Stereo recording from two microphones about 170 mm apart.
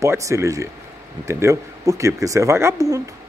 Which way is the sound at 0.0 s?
15° right (ahead or behind).